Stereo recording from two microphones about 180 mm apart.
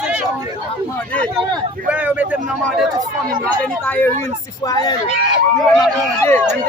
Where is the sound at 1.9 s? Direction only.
5° right (ahead or behind).